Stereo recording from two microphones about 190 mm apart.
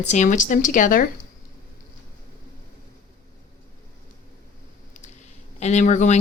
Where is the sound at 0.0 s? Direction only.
40° left (ahead or behind).